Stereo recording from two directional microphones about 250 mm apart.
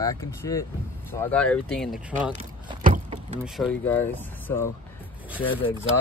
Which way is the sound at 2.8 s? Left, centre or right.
Right.